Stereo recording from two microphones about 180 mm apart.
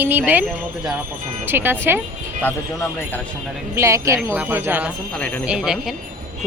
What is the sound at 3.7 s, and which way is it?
A woman's voice, 15° right (ahead or behind).